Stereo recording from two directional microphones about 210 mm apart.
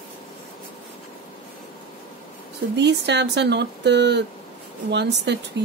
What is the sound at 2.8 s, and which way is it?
Speech, 55° right (ahead or behind).